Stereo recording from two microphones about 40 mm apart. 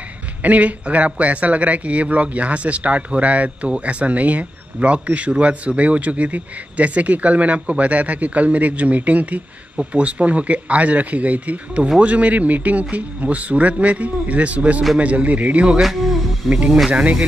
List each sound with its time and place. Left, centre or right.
0.4 s a man's voice: right
15.8 s speech: centre
16.9 s a man's voice: right